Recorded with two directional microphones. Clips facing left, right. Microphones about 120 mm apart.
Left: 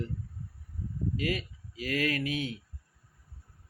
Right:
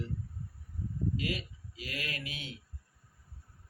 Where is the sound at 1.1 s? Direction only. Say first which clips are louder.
Left 4 dB; 45° left (ahead or behind).